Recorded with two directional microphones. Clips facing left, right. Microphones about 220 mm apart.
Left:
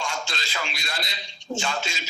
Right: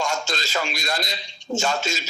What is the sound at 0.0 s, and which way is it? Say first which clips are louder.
A man's voice: right 6 dB; 45° right (ahead or behind).